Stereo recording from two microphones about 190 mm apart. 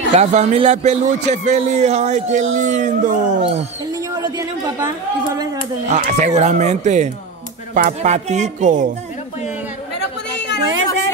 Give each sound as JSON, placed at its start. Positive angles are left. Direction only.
{"t": 0.1, "sound": "a man's voice", "side_deg": -35}
{"t": 4.2, "sound": "a woman's voice", "side_deg": -15}
{"t": 5.9, "sound": "a man's voice", "side_deg": -35}